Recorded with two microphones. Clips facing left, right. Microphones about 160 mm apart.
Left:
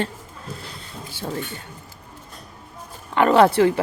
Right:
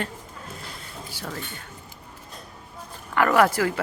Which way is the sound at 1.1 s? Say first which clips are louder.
Left 6 dB; 25° left (ahead or behind).